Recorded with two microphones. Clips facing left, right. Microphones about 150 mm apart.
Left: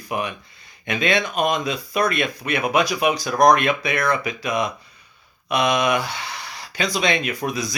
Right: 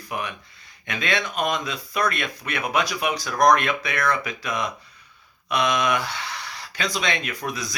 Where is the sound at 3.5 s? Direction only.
10° left (ahead or behind).